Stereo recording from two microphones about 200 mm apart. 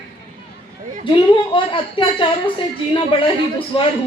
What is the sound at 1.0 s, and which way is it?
A woman's voice, 25° left (ahead or behind).